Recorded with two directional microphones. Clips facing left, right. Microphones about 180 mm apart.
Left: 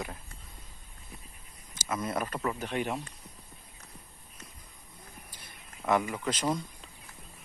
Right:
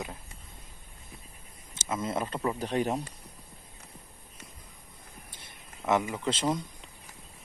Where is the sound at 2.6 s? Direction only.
40° right (ahead or behind).